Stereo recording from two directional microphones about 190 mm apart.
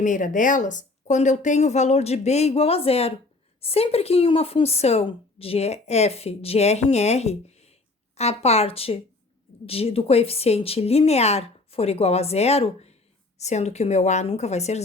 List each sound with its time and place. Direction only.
0.0 s speech: 40° left (ahead or behind)